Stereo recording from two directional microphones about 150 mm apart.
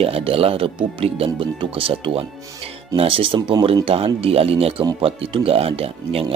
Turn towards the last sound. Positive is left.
turn(degrees=-40)  # may be behind; listen again after turning